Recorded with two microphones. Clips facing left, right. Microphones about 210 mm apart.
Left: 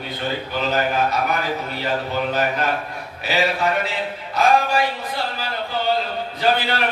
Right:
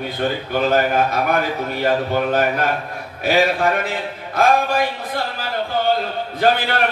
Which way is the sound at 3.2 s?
50° right (ahead or behind).